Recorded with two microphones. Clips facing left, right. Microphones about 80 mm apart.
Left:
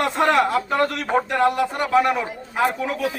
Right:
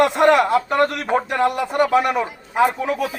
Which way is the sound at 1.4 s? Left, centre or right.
Centre.